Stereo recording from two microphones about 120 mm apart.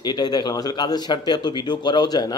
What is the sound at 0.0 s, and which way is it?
Speech, 35° left (ahead or behind).